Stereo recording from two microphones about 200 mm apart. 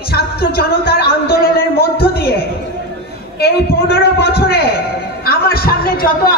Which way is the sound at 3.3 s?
50° left (ahead or behind).